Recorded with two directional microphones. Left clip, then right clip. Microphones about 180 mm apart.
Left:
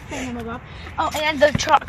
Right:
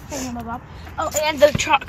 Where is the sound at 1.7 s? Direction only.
20° left (ahead or behind).